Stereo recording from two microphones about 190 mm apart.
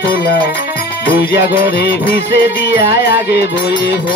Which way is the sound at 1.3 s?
60° left (ahead or behind).